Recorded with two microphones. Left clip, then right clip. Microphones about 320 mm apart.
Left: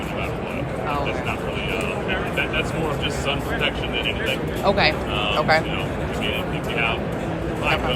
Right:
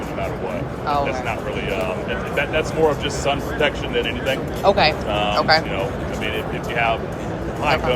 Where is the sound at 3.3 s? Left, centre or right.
Right.